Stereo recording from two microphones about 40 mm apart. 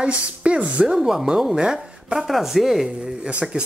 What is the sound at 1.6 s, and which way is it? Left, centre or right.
Speech, right.